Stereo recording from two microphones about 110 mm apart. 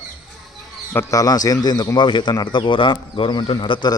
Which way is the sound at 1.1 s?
35° left (ahead or behind).